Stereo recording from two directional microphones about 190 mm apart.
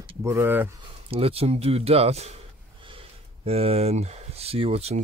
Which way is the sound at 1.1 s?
30° right (ahead or behind).